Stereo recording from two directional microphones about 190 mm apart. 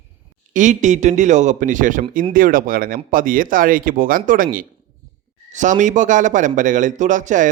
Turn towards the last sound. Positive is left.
turn(degrees=-40)  # may be behind; listen again after turning